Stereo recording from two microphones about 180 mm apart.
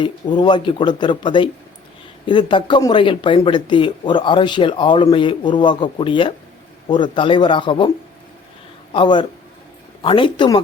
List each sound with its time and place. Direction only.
0.3 s speech: 25° left (ahead or behind)
8.9 s speech: 25° left (ahead or behind)